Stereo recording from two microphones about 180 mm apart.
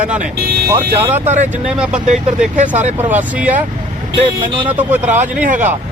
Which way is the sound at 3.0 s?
10° right (ahead or behind).